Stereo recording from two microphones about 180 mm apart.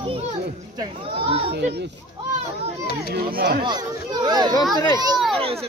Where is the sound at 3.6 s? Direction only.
25° right (ahead or behind).